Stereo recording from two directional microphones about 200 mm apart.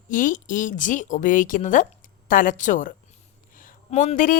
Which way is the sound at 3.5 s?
40° left (ahead or behind).